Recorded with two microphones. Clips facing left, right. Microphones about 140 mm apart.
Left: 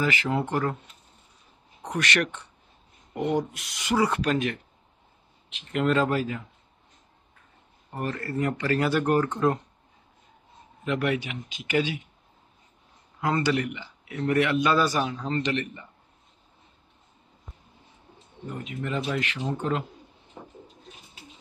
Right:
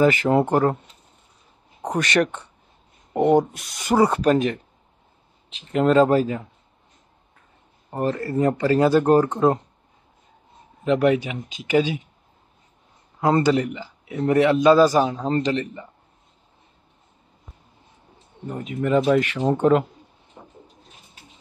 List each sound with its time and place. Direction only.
0.0 s speech: 45° right (ahead or behind)
1.8 s speech: 40° right (ahead or behind)
5.7 s a man's voice: 35° right (ahead or behind)
7.9 s a man's voice: 35° right (ahead or behind)
10.8 s a man's voice: 35° right (ahead or behind)
13.2 s a man's voice: 35° right (ahead or behind)
18.5 s speech: 45° right (ahead or behind)
19.4 s speech: 60° right (ahead or behind)